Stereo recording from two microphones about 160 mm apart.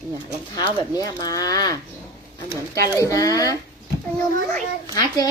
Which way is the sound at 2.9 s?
20° left (ahead or behind).